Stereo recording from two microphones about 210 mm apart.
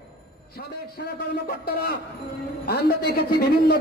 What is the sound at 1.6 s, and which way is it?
A man's voice, 50° left (ahead or behind).